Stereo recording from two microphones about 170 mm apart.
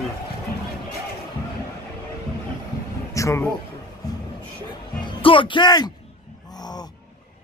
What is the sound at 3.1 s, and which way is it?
Speech, 15° left (ahead or behind).